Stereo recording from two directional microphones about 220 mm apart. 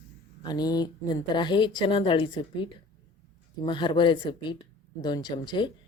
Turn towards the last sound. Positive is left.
turn(degrees=20)  # may be behind; listen again after turning